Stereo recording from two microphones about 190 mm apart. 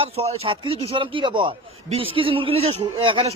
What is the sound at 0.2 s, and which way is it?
A man's voice, 30° right (ahead or behind).